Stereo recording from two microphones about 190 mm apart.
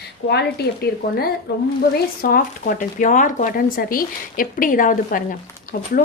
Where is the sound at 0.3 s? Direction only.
60° left (ahead or behind).